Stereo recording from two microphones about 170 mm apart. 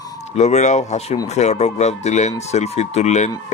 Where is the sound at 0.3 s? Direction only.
40° left (ahead or behind).